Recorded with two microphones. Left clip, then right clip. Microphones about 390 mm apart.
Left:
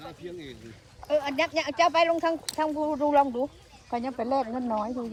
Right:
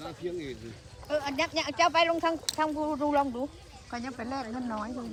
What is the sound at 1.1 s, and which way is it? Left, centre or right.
Speech, left.